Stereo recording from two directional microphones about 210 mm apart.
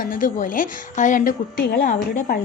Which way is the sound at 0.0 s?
40° left (ahead or behind).